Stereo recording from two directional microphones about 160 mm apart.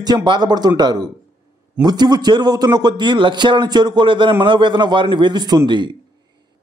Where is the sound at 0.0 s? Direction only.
25° right (ahead or behind).